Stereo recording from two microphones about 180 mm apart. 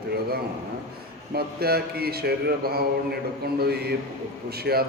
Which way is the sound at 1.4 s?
60° right (ahead or behind).